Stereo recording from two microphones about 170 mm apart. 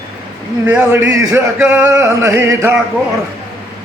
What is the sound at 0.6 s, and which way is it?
Male singing, 10° right (ahead or behind).